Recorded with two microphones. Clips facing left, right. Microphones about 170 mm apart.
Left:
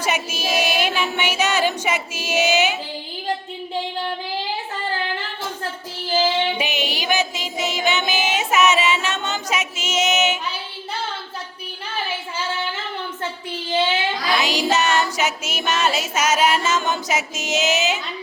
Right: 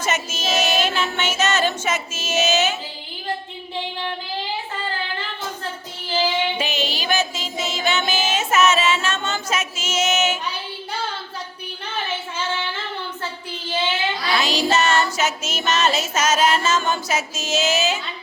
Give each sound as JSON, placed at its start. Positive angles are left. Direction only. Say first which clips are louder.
{"t": 0.0, "sound": "music", "louder": "left 1 dB", "side_deg": 10}
{"t": 6.6, "sound": "a sound", "louder": "even", "side_deg": 15}
{"t": 14.3, "sound": "music", "louder": "right 1 dB", "side_deg": 15}